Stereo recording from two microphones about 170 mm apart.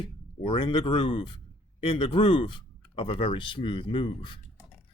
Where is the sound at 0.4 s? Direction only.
30° left (ahead or behind).